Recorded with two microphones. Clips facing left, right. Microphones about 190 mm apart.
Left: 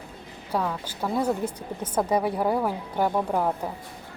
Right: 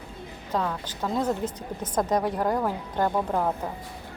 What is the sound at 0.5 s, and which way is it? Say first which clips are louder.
A woman's voice: left 1 dB; 10° left (ahead or behind).